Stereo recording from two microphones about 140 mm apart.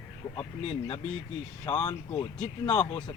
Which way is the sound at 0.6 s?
45° left (ahead or behind).